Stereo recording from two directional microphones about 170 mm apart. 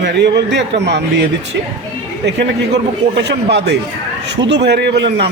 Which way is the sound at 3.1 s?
90° right.